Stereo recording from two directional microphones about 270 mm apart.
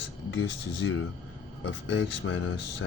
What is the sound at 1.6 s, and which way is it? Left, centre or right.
Speech, left.